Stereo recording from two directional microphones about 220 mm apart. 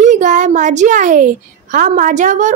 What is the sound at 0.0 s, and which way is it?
A child's voice, 35° right (ahead or behind).